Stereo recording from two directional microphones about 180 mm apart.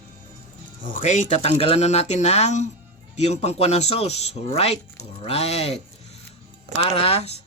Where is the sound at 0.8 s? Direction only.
50° left (ahead or behind).